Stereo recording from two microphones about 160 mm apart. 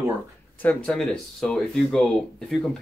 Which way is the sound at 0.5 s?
5° left (ahead or behind).